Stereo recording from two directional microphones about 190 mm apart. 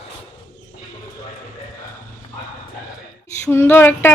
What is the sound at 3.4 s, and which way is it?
Speech, 10° left (ahead or behind).